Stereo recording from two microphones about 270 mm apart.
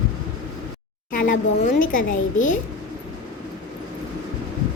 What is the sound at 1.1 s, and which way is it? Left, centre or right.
Child singing, left.